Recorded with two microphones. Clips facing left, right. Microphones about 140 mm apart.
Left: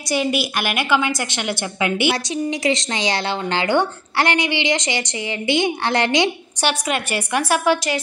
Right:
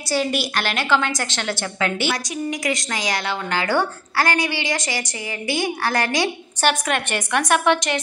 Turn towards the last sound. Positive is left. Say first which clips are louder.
# even
turn(degrees=5)  # may be behind; listen again after turning